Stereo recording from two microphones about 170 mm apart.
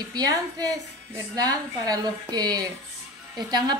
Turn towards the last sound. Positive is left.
turn(degrees=-25)  # may be behind; listen again after turning